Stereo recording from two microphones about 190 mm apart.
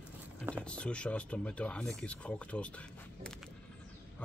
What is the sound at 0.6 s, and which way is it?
A man's voice, 5° left (ahead or behind).